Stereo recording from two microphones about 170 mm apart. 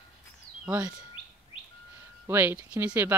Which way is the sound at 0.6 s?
5° right (ahead or behind).